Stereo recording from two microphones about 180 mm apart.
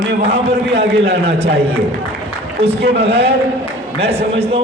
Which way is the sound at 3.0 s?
35° right (ahead or behind).